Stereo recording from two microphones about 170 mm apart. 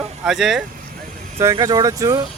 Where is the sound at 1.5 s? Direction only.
20° right (ahead or behind).